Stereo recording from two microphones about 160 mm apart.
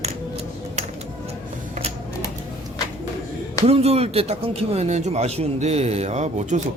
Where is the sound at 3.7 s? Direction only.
40° right (ahead or behind).